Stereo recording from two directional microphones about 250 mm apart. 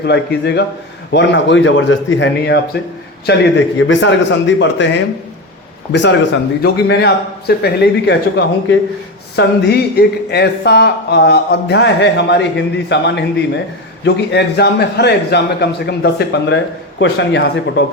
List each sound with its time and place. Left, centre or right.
0.0 s a man's voice: left
5.9 s a man's voice: left